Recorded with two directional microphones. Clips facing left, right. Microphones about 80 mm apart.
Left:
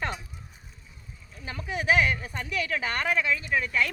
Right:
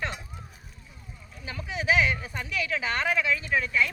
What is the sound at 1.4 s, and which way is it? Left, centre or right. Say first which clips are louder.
Speech: left 1 dB; left.